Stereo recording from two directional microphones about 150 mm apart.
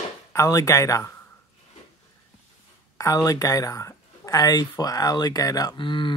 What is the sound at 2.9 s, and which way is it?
Speech, 20° left (ahead or behind).